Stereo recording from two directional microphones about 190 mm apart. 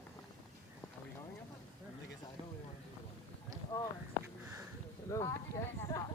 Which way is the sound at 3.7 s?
10° left (ahead or behind).